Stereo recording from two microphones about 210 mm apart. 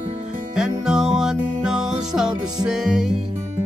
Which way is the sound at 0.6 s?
5° right (ahead or behind).